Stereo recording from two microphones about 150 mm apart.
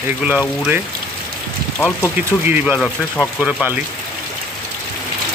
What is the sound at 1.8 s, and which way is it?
Speech, 15° left (ahead or behind).